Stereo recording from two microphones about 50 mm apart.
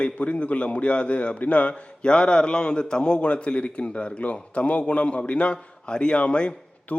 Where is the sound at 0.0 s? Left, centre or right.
Left.